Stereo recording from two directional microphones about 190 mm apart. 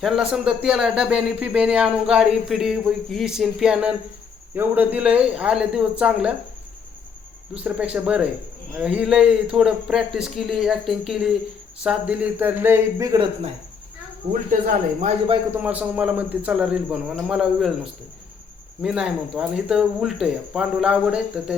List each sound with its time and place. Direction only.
0.0 s a man's voice: 5° right (ahead or behind)
7.5 s a man's voice: 5° right (ahead or behind)
15.5 s a man's voice: 10° right (ahead or behind)
18.8 s a man's voice: 5° right (ahead or behind)